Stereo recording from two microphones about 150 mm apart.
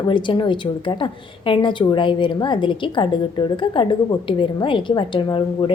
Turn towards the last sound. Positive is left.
turn(degrees=30)  # may be behind; listen again after turning